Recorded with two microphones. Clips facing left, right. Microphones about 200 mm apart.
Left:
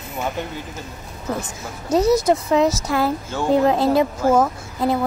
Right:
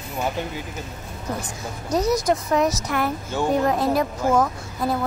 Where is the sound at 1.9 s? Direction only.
25° left (ahead or behind).